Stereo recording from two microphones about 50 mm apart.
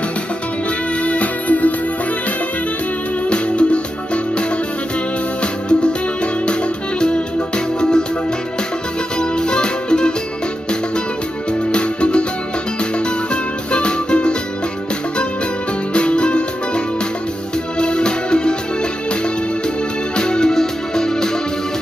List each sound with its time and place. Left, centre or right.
1.0 s music: left
3.3 s music: left
9.2 s music: centre
11.7 s music: left
13.3 s music: left
15.9 s music: left
20.2 s music: centre